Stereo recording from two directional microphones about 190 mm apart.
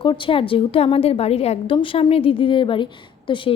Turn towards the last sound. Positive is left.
turn(degrees=25)  # may be behind; listen again after turning